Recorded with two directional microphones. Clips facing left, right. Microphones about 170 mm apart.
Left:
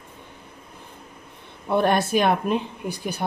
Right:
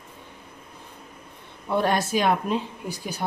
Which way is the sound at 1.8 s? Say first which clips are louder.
Left 3 dB; 60° left (ahead or behind).